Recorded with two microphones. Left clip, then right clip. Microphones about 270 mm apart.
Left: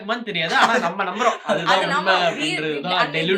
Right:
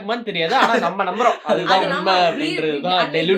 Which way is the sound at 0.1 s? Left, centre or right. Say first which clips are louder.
Right 2 dB; left.